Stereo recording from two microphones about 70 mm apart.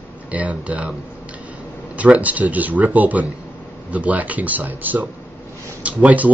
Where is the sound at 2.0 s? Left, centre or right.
Right.